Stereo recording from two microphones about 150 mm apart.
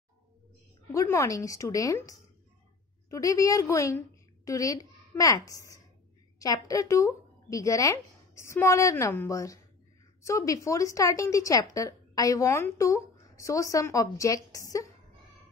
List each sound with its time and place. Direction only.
0.9 s a woman's voice: 20° left (ahead or behind)